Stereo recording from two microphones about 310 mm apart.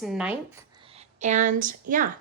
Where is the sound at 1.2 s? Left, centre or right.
Right.